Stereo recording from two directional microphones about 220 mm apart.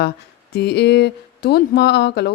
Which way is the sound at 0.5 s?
50° left (ahead or behind).